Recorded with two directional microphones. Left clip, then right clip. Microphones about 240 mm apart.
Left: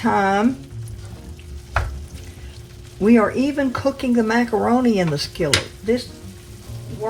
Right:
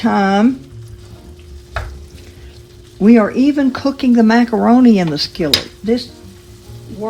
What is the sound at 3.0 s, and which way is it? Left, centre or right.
Speech, right.